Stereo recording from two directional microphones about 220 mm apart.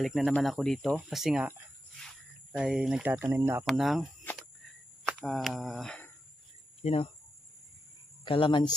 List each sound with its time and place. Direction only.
0.0 s speech: centre (ahead or behind)
6.8 s speech: 30° left (ahead or behind)
8.3 s speech: 20° left (ahead or behind)